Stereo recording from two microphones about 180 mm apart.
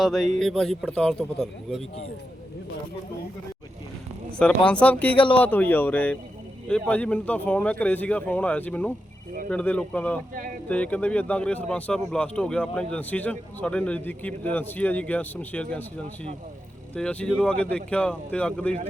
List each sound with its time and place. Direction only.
0.0 s a man's voice: centre (ahead or behind)
4.4 s speech: 5° left (ahead or behind)
5.1 s a man's voice: 30° left (ahead or behind)
5.4 s speech: 10° left (ahead or behind)
16.9 s speech: 5° left (ahead or behind)